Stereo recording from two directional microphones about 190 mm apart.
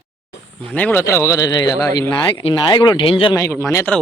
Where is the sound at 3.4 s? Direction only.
15° left (ahead or behind).